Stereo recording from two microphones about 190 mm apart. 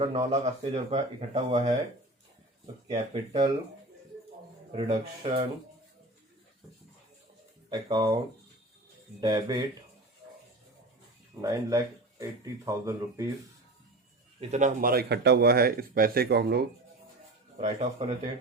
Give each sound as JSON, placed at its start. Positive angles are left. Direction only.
{"t": 0.0, "sound": "speech", "side_deg": -35}
{"t": 2.8, "sound": "speech", "side_deg": -30}
{"t": 4.7, "sound": "speech", "side_deg": -30}
{"t": 7.7, "sound": "speech", "side_deg": -20}
{"t": 9.2, "sound": "speech", "side_deg": -20}
{"t": 11.3, "sound": "speech", "side_deg": -20}
{"t": 14.5, "sound": "speech", "side_deg": -45}
{"t": 17.6, "sound": "speech", "side_deg": -35}